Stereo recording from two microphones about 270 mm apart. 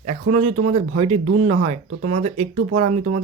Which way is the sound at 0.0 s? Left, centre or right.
Right.